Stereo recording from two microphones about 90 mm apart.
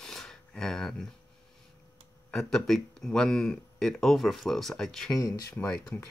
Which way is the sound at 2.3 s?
5° left (ahead or behind).